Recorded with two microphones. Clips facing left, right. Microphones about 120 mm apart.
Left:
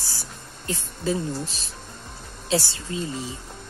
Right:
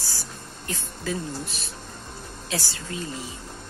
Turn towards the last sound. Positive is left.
turn(degrees=25)  # may be behind; listen again after turning